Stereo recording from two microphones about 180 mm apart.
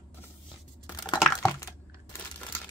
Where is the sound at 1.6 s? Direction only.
15° left (ahead or behind).